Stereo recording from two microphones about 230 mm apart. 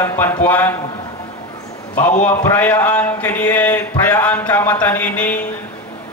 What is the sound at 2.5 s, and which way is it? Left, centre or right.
A man's voice, centre.